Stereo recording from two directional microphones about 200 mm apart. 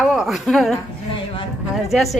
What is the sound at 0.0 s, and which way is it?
A woman's voice, centre (ahead or behind).